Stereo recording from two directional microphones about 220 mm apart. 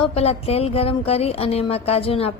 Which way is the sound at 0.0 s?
30° left (ahead or behind).